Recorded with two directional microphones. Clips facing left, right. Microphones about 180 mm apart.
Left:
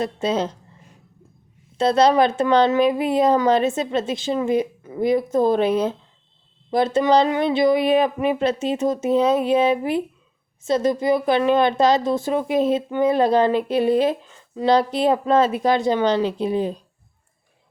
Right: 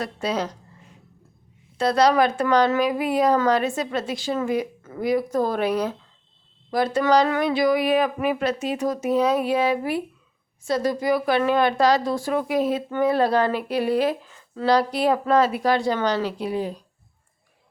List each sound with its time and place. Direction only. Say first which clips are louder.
0.0 s a woman's voice: left 4 dB; 25° left (ahead or behind)
1.8 s a woman's voice: left 2 dB; 25° left (ahead or behind)